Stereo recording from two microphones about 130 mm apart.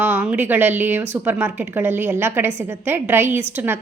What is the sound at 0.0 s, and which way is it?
A woman's voice, 15° right (ahead or behind).